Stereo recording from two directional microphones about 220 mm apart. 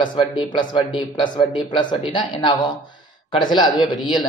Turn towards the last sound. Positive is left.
turn(degrees=20)  # may be behind; listen again after turning